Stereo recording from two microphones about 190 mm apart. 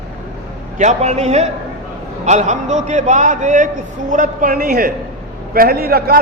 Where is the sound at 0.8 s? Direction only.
40° right (ahead or behind).